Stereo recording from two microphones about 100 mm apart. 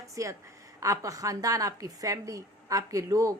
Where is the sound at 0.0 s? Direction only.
30° right (ahead or behind).